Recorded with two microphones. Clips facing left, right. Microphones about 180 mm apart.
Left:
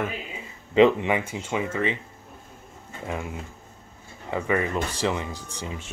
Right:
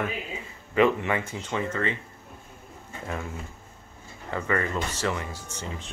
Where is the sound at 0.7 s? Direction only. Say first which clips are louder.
Left 4 dB; 20° left (ahead or behind).